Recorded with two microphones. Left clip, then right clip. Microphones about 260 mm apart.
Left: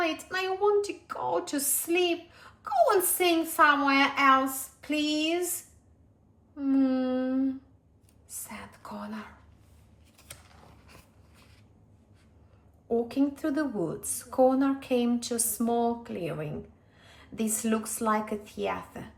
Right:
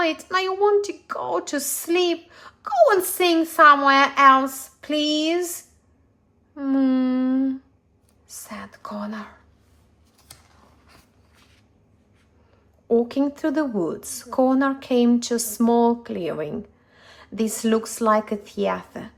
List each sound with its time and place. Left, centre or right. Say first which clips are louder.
0.0 s a woman's voice: right 7 dB; right
6.6 s a woman's voice: right 5 dB; right
12.9 s a woman's voice: right 7 dB; right